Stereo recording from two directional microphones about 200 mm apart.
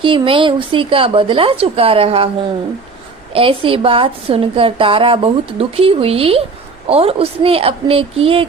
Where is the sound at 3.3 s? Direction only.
25° right (ahead or behind).